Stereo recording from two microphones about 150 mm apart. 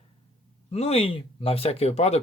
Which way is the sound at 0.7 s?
45° left (ahead or behind).